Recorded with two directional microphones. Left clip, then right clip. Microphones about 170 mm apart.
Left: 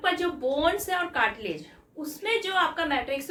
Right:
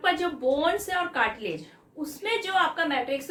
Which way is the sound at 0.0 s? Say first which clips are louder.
Right 1 dB; 10° left (ahead or behind).